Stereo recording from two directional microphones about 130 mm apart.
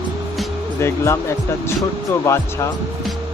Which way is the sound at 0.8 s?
20° left (ahead or behind).